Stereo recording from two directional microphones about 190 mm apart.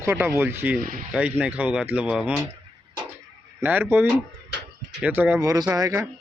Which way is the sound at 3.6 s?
10° right (ahead or behind).